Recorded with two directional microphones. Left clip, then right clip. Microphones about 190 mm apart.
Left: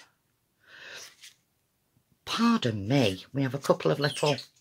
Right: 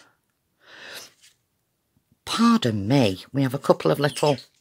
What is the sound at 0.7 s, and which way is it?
Sneeze, 45° right (ahead or behind).